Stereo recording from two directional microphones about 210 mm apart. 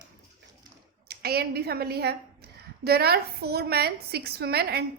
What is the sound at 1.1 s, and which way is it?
A woman's voice, 50° right (ahead or behind).